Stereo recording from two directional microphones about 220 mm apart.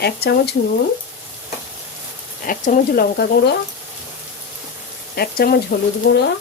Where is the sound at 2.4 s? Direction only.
40° left (ahead or behind).